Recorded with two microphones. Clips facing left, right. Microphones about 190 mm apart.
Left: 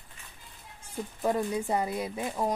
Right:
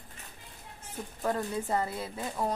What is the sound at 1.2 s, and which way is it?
A woman's voice, 15° left (ahead or behind).